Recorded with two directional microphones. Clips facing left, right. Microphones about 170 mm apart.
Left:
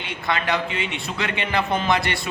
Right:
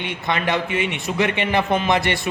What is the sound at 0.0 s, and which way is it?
A man's voice, 20° right (ahead or behind).